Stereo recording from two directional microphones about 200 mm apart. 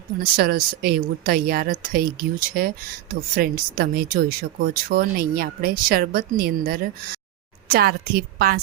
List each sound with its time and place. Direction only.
0.3 s a woman's voice: 50° right (ahead or behind)